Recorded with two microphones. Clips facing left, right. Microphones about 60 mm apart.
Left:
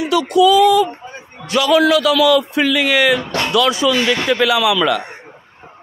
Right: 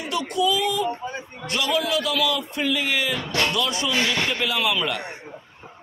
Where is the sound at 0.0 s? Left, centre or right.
Left.